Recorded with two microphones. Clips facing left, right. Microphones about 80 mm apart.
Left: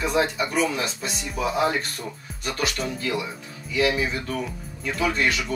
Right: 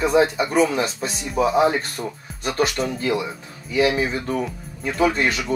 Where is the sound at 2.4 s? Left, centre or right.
Right.